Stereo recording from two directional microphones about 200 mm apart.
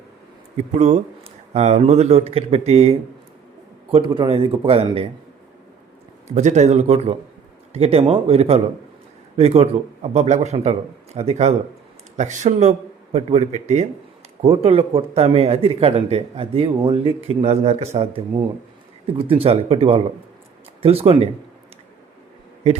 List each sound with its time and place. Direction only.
0.5 s speech: 35° right (ahead or behind)
6.2 s speech: 35° right (ahead or behind)